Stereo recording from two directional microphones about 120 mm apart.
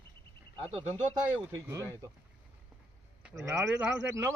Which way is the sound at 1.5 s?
25° right (ahead or behind).